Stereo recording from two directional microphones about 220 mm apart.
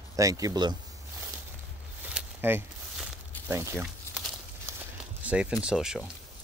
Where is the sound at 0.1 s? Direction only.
15° right (ahead or behind).